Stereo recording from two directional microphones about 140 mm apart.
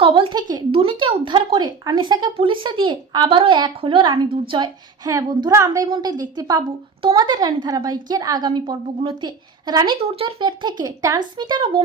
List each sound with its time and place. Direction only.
0.0 s a woman's voice: 40° right (ahead or behind)
10.0 s speech: 40° right (ahead or behind)